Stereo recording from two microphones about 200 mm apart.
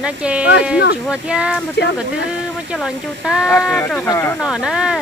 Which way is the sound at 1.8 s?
55° left (ahead or behind).